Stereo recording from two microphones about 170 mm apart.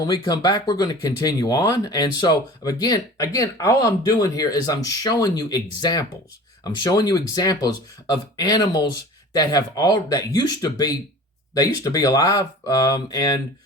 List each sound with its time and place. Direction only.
0.0 s speech: 20° left (ahead or behind)